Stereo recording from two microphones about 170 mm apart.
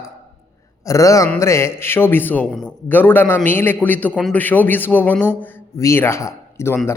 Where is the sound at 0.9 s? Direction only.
20° left (ahead or behind).